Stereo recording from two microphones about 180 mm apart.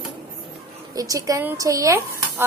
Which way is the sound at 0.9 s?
20° right (ahead or behind).